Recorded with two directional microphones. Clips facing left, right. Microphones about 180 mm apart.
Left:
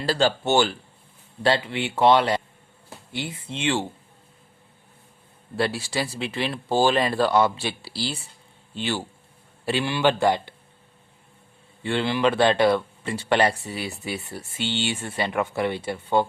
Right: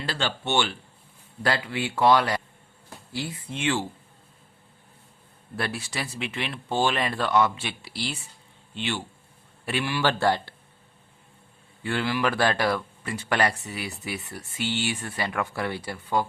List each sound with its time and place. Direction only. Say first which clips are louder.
0.0 s speech: left 8 dB; 40° left (ahead or behind)
1.4 s speech: left 4 dB; 25° left (ahead or behind)
5.5 s speech: left 6 dB; 30° left (ahead or behind)
9.6 s speech: left 4 dB; 25° left (ahead or behind)
11.8 s speech: left 3 dB; 25° left (ahead or behind)